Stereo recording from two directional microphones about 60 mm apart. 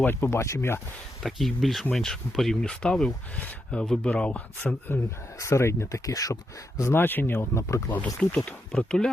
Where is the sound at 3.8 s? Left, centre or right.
Centre.